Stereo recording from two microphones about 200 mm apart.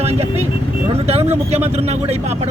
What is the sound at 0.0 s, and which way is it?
Speech, 30° right (ahead or behind).